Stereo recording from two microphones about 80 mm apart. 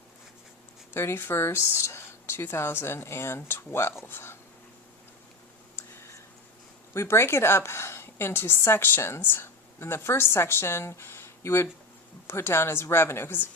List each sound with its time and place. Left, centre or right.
0.9 s a woman's voice: left
6.9 s a woman's voice: left